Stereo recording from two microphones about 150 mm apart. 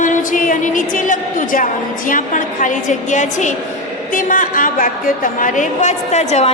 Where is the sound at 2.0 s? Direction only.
60° left (ahead or behind).